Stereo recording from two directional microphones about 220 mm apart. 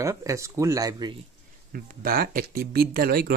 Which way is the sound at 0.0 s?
15° right (ahead or behind).